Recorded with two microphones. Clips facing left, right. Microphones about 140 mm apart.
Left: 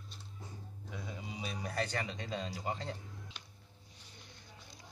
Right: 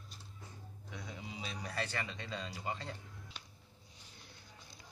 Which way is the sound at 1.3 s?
20° left (ahead or behind).